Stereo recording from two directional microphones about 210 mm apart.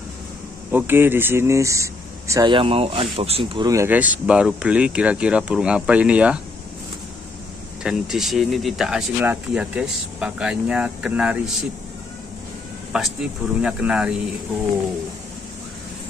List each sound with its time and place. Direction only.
0.7 s speech: 10° right (ahead or behind)
7.8 s speech: centre (ahead or behind)
12.9 s speech: 5° right (ahead or behind)